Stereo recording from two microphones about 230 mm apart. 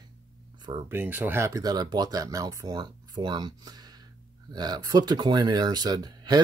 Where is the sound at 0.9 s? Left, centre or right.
Centre.